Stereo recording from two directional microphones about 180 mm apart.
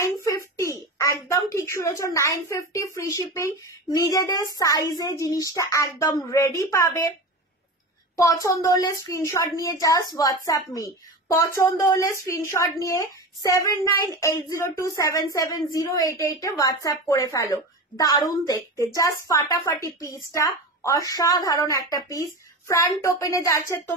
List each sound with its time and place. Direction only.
0.0 s a sound: 15° left (ahead or behind)
4.1 s a woman's voice: 20° left (ahead or behind)
8.2 s a woman's voice: 20° left (ahead or behind)